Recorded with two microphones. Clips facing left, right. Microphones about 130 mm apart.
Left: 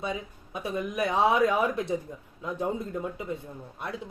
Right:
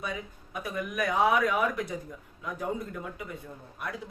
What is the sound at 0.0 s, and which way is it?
Speech, 25° left (ahead or behind).